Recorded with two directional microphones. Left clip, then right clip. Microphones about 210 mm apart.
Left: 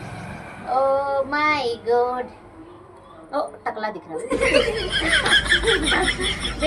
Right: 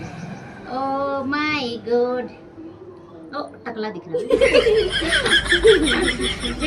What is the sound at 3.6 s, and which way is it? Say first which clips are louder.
Child singing: left 2 dB; 15° left (ahead or behind).